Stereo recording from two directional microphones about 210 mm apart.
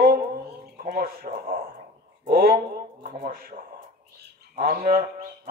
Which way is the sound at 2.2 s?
45° right (ahead or behind).